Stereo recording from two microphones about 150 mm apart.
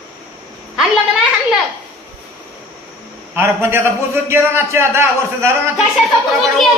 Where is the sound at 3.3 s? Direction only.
15° right (ahead or behind).